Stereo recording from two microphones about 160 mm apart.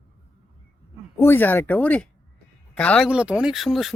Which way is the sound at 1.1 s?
15° left (ahead or behind).